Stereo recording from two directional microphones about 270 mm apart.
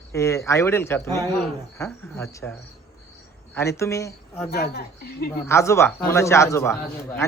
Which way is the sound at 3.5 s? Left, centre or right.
Centre.